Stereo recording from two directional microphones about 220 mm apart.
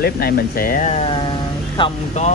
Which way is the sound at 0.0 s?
45° left (ahead or behind).